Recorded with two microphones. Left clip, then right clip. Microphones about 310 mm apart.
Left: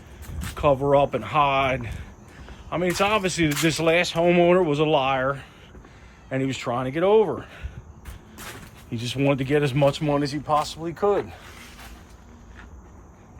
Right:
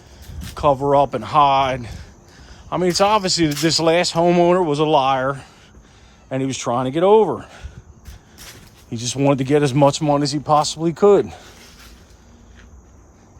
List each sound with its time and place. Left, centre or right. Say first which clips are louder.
0.5 s speech: right 4 dB; centre
8.9 s speech: right 5 dB; centre